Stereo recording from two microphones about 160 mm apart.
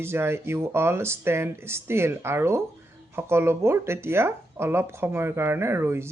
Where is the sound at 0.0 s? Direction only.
15° right (ahead or behind).